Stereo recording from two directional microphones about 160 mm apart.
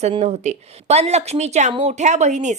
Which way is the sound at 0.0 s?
40° right (ahead or behind).